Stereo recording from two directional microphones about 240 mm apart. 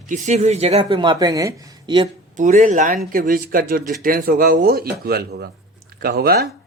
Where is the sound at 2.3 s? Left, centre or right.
Right.